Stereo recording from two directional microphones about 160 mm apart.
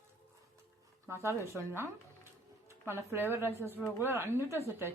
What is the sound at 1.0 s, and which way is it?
A woman's voice, 15° right (ahead or behind).